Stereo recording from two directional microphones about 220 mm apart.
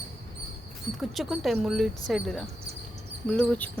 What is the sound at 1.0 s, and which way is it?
A child's voice, centre (ahead or behind).